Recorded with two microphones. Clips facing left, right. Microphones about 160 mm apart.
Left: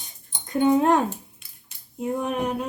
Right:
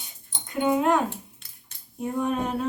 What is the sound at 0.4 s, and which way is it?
Speech, 35° left (ahead or behind).